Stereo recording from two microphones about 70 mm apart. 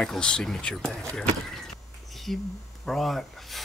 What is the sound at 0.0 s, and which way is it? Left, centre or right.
Speech, centre.